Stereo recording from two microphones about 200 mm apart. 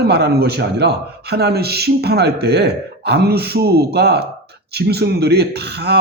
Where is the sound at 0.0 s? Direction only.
55° right (ahead or behind).